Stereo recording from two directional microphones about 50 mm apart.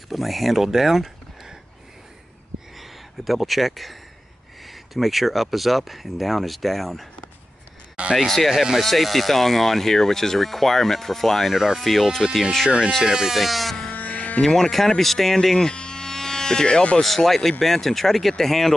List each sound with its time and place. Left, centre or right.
0.1 s speech: centre
2.7 s speech: centre
7.9 s a sound: right
8.3 s speech: centre
13.0 s speech: centre
13.9 s a sound: left
14.4 s speech: centre
17.0 s speech: centre